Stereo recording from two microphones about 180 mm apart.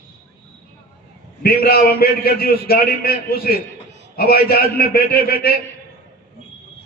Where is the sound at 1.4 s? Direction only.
55° left (ahead or behind).